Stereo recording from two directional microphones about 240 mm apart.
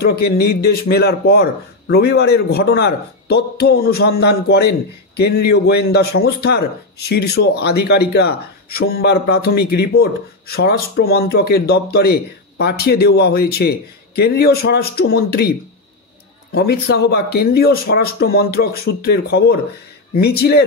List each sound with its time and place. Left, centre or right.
0.0 s speech: left
16.5 s speech: left